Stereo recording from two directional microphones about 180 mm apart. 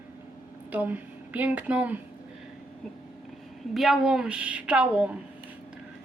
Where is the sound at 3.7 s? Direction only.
Centre (ahead or behind).